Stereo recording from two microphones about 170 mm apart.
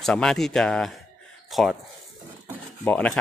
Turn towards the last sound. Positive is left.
turn(degrees=5)  # may be behind; listen again after turning